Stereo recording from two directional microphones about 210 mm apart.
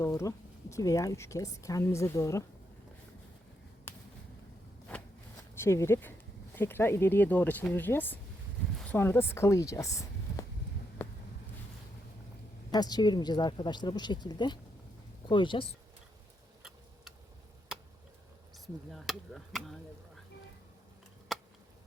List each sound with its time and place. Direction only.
0.0 s speech: 15° left (ahead or behind)
5.5 s speech: 10° left (ahead or behind)
12.7 s a woman's voice: 20° left (ahead or behind)
16.6 s tick-tock: 5° right (ahead or behind)
18.5 s speech: centre (ahead or behind)
21.3 s a sound: centre (ahead or behind)